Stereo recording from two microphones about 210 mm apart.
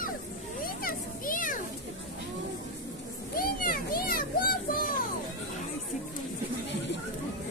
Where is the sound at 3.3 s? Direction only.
45° left (ahead or behind).